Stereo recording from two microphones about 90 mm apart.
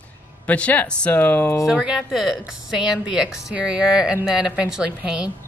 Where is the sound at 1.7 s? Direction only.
10° right (ahead or behind).